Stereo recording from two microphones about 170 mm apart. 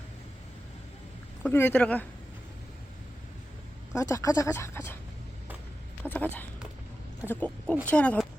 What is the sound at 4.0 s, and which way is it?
Speech, 20° left (ahead or behind).